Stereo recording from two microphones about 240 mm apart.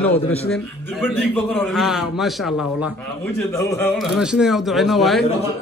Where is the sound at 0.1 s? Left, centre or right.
Left.